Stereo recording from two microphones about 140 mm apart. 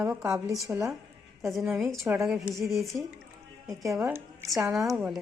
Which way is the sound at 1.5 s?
Centre (ahead or behind).